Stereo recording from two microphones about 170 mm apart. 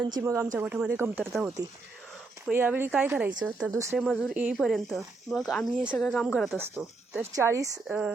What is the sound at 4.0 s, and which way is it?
Speech, 5° left (ahead or behind).